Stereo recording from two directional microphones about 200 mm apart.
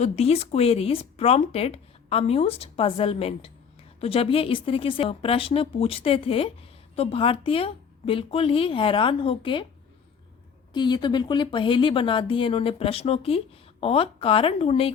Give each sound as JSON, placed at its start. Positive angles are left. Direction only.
{"t": 0.0, "sound": "speech", "side_deg": 30}
{"t": 10.8, "sound": "speech", "side_deg": 20}